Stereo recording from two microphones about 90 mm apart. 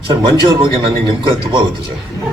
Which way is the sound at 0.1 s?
65° right (ahead or behind).